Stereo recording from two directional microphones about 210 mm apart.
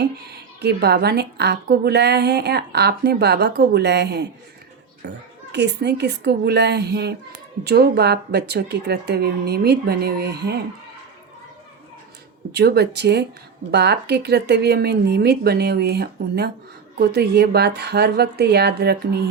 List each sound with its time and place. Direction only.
0.6 s a woman's voice: 50° right (ahead or behind)
12.5 s a woman's voice: 50° right (ahead or behind)